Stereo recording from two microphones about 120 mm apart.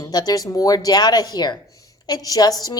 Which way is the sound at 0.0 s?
35° left (ahead or behind).